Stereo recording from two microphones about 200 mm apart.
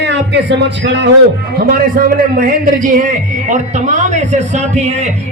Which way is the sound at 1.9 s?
45° right (ahead or behind).